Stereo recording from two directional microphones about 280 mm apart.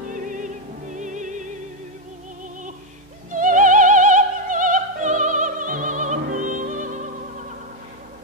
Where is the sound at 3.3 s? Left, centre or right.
Right.